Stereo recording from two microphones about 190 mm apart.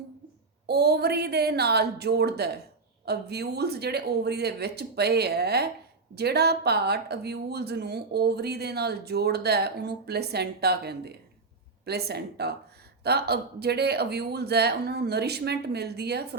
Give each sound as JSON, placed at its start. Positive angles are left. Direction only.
{"t": 0.7, "sound": "speech", "side_deg": -55}